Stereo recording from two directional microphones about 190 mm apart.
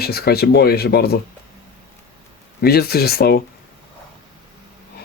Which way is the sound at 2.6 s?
55° left (ahead or behind).